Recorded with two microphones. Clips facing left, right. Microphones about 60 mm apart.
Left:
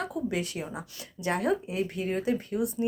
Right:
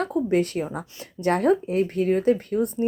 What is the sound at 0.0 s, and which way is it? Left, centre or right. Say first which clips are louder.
A woman's voice: right 9 dB; right.